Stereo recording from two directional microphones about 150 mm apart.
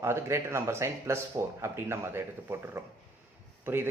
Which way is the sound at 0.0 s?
15° right (ahead or behind).